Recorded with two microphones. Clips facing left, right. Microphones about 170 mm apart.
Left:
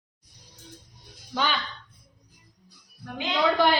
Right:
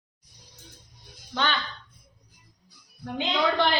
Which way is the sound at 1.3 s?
10° left (ahead or behind).